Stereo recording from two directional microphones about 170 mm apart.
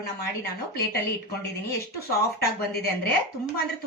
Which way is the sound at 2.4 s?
70° left (ahead or behind).